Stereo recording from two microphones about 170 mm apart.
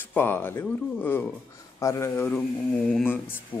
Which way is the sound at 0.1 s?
10° left (ahead or behind).